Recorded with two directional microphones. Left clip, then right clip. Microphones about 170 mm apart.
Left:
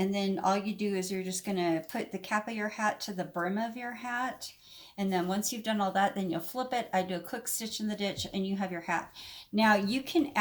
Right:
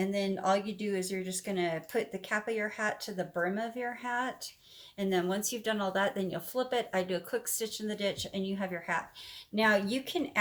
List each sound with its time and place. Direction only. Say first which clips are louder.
0.0 s speech: left 1 dB; 45° right (ahead or behind)